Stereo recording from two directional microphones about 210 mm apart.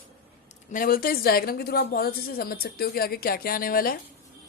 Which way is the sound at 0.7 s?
40° left (ahead or behind).